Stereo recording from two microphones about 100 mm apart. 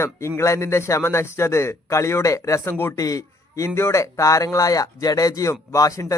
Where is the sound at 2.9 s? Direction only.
35° left (ahead or behind).